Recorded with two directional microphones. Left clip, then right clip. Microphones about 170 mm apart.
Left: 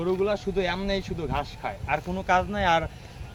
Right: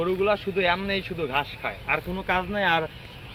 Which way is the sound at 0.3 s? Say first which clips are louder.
Right 4 dB; 90° left.